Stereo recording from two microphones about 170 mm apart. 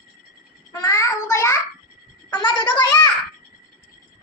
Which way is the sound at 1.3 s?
15° left (ahead or behind).